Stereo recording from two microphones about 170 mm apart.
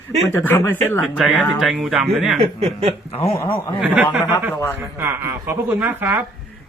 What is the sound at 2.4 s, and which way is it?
Speech, 40° right (ahead or behind).